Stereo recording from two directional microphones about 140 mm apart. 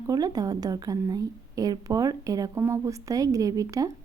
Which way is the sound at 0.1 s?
30° right (ahead or behind).